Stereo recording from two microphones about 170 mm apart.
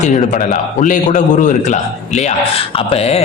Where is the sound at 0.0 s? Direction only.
45° left (ahead or behind).